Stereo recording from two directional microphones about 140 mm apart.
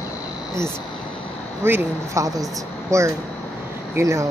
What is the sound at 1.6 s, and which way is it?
Speech, 20° right (ahead or behind).